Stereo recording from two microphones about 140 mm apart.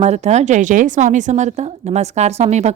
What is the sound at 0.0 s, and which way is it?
A woman's voice, 50° right (ahead or behind).